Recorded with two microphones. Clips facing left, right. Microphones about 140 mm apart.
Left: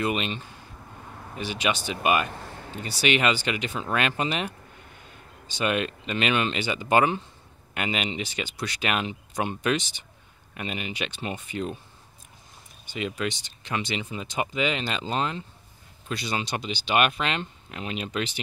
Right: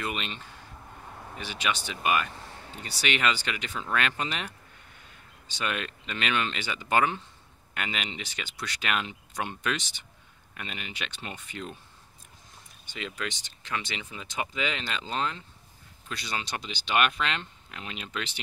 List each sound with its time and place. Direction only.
0.0 s speech: 15° left (ahead or behind)
1.4 s speech: 15° left (ahead or behind)
12.9 s speech: 15° left (ahead or behind)